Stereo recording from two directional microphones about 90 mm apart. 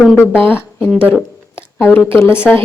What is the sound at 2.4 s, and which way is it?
Speech, 25° left (ahead or behind).